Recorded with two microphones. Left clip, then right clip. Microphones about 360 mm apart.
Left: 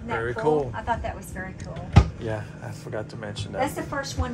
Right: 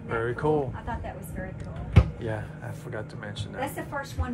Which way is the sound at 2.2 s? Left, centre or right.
Centre.